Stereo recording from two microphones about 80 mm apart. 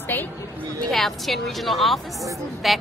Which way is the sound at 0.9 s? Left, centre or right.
Centre.